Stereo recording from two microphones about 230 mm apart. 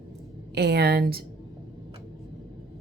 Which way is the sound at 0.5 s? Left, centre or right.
Right.